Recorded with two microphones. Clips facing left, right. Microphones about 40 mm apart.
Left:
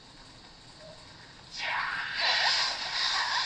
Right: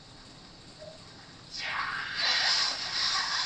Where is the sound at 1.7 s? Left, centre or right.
Centre.